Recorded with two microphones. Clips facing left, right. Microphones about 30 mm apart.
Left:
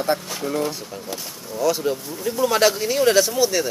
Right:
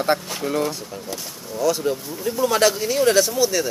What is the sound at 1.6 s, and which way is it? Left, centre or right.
Speech, centre.